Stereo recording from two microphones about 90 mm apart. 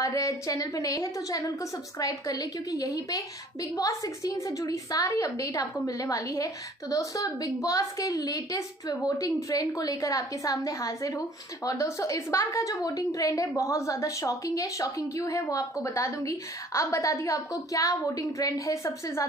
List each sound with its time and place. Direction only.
0.0 s a woman's voice: 40° left (ahead or behind)